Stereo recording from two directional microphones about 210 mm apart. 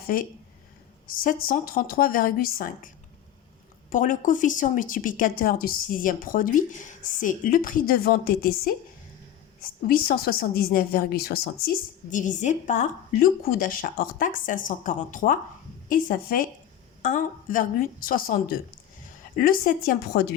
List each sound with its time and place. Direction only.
0.1 s a woman's voice: 40° left (ahead or behind)
9.8 s a woman's voice: 45° left (ahead or behind)
12.1 s a woman's voice: 35° left (ahead or behind)